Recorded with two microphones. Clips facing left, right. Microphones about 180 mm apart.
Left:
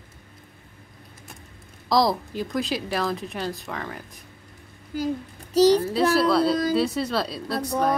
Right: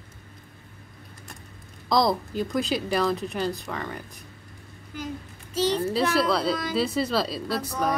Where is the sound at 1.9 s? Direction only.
Centre (ahead or behind).